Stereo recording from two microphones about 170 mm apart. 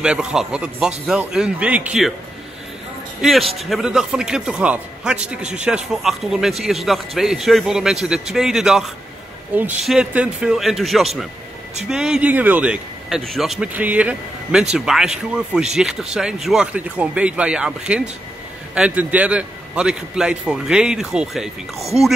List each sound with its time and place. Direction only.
0.0 s speech: 5° right (ahead or behind)
3.2 s speech: centre (ahead or behind)
5.4 s speech: 45° right (ahead or behind)
5.7 s speech: 5° right (ahead or behind)